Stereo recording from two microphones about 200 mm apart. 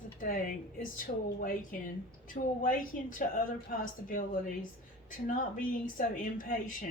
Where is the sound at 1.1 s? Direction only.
45° left (ahead or behind).